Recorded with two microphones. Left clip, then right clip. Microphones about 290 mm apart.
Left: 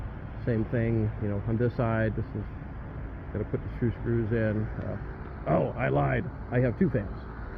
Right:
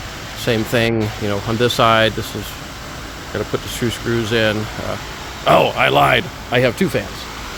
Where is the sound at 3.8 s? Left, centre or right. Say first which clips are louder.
Right 9 dB; right.